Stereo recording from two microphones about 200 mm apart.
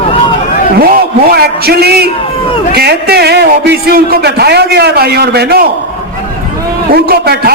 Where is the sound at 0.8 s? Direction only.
50° right (ahead or behind).